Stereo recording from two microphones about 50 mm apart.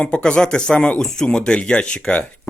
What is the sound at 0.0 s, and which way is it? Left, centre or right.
Speech, centre.